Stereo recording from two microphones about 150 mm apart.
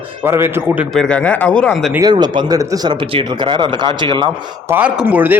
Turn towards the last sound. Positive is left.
turn(degrees=-10)  # may be behind; listen again after turning